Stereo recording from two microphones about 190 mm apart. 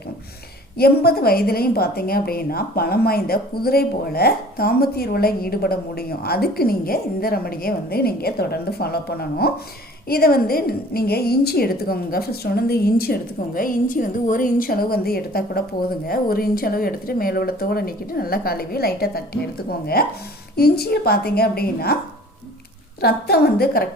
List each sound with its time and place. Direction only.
0.8 s a woman's voice: 55° left (ahead or behind)
23.0 s a woman's voice: 55° left (ahead or behind)